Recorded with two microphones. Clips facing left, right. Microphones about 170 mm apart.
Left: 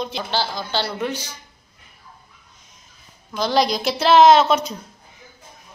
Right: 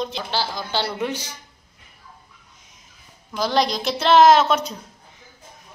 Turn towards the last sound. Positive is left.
turn(degrees=0)  # may be behind; listen again after turning